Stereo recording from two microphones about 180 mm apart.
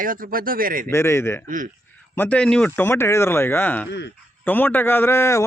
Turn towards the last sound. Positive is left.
turn(degrees=15)  # may be behind; listen again after turning